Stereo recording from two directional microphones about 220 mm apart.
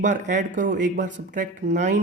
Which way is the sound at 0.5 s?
35° right (ahead or behind).